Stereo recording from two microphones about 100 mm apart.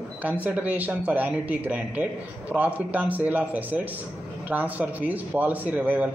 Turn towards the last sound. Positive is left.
turn(degrees=-15)  # may be behind; listen again after turning